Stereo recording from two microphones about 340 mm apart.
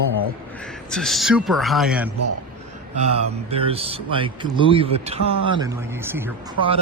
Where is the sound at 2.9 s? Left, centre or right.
Centre.